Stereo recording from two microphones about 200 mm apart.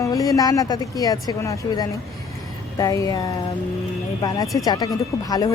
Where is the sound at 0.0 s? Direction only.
15° left (ahead or behind).